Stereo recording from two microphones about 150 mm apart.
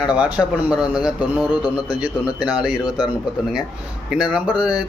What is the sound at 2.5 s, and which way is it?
Speech, 5° right (ahead or behind).